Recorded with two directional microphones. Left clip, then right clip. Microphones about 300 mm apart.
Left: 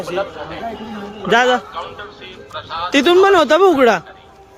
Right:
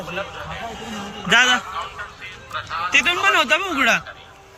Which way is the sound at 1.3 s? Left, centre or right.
Centre.